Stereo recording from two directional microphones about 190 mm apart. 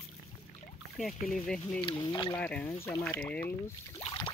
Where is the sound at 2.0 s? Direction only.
25° left (ahead or behind).